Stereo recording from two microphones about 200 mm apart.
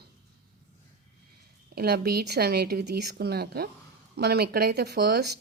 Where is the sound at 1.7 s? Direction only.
50° right (ahead or behind).